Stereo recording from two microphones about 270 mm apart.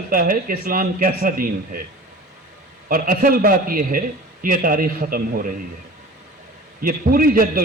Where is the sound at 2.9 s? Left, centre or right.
Right.